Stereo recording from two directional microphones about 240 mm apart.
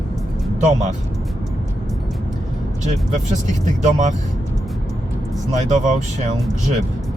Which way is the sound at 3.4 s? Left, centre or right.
Right.